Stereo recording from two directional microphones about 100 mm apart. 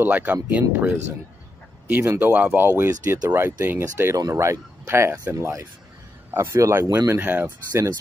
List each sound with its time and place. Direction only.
0.0 s speech: 15° right (ahead or behind)